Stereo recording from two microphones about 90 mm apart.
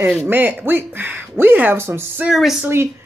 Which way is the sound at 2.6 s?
30° right (ahead or behind).